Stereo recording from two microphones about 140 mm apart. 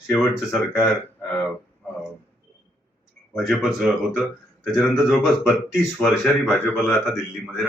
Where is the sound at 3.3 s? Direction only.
Centre (ahead or behind).